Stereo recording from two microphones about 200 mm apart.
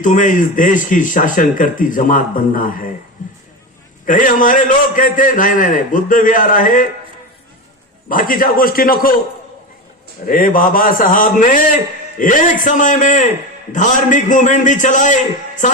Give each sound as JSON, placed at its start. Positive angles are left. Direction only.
{"t": 0.0, "sound": "speech", "side_deg": 40}
{"t": 3.2, "sound": "a sound", "side_deg": 40}
{"t": 4.0, "sound": "speech", "side_deg": 40}
{"t": 8.1, "sound": "a man's voice", "side_deg": 45}
{"t": 10.2, "sound": "a man's voice", "side_deg": 45}